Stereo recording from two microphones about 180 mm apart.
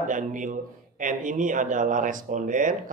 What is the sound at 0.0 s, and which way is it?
A man's voice, 45° right (ahead or behind).